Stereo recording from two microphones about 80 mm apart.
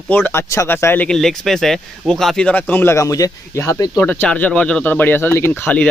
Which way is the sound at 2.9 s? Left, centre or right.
Left.